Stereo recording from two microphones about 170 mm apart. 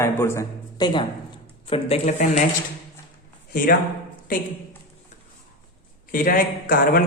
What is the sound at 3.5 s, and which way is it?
Speech, 55° left (ahead or behind).